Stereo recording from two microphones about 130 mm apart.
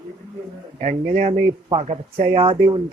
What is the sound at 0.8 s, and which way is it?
Speech, 75° right (ahead or behind).